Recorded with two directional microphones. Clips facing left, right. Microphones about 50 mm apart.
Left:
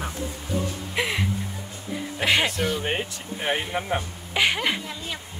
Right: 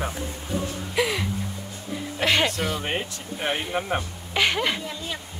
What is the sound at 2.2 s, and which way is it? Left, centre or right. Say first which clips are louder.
Speech: even; centre.